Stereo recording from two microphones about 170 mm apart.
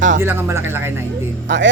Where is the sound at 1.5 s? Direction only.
90° right.